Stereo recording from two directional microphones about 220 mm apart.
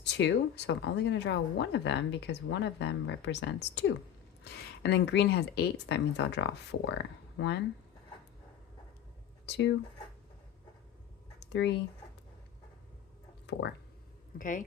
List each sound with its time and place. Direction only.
0.0 s speech: 50° left (ahead or behind)
9.5 s speech: 55° left (ahead or behind)
11.3 s a sound: 50° left (ahead or behind)
13.5 s speech: 50° left (ahead or behind)
14.3 s speech: 35° left (ahead or behind)